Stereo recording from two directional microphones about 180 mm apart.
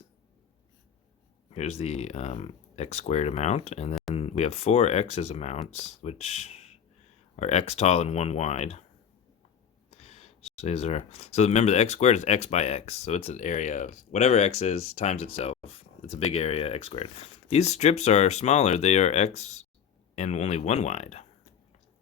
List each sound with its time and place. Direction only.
1.5 s speech: 35° left (ahead or behind)
9.9 s speech: 35° left (ahead or behind)